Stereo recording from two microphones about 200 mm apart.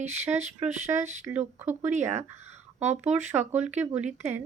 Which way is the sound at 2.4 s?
35° right (ahead or behind).